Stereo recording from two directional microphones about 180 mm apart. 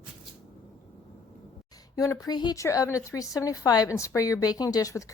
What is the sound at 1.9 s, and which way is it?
Speech, 20° left (ahead or behind).